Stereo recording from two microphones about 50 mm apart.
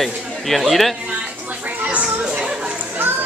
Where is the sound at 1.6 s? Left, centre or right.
Right.